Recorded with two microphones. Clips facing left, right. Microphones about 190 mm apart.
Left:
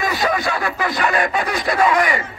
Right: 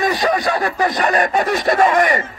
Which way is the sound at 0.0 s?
35° right (ahead or behind).